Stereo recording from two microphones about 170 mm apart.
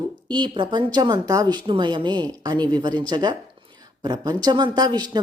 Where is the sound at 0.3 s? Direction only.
25° right (ahead or behind).